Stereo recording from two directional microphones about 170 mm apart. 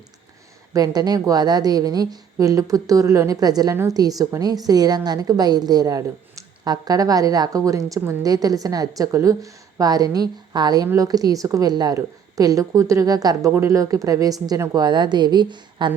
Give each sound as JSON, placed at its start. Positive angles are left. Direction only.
{"t": 0.7, "sound": "a woman's voice", "side_deg": -25}